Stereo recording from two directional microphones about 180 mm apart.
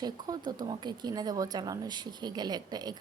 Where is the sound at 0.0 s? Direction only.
25° right (ahead or behind).